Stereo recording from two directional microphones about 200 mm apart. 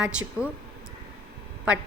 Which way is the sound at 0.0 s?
5° right (ahead or behind).